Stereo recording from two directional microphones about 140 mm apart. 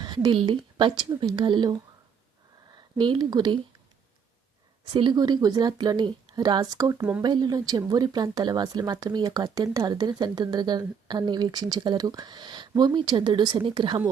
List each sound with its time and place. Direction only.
0.0 s speech: 30° right (ahead or behind)
4.9 s speech: 35° right (ahead or behind)